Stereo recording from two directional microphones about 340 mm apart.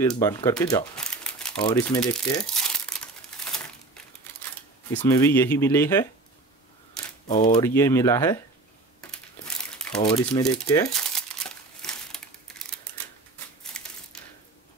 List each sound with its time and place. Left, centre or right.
0.0 s speech: centre
3.3 s crumpling: centre
4.9 s speech: centre
7.2 s speech: left
7.5 s speech: centre
9.8 s crumpling: centre
10.0 s speech: centre
10.9 s crumpling: centre